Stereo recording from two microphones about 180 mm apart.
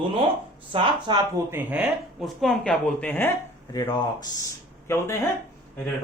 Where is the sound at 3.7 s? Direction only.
20° left (ahead or behind).